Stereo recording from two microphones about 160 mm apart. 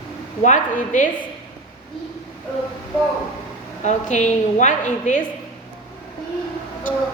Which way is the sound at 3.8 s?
50° left (ahead or behind).